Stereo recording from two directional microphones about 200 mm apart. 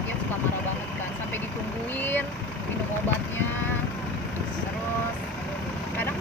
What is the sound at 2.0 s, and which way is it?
Vehicle, 10° left (ahead or behind).